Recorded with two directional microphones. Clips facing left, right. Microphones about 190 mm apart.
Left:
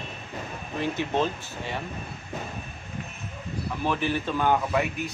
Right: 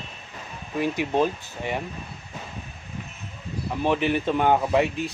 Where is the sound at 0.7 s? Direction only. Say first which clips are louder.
Right 3 dB; 10° right (ahead or behind).